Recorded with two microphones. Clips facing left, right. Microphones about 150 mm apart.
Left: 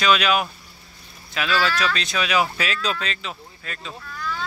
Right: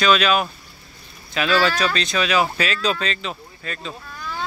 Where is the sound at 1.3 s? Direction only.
Centre (ahead or behind).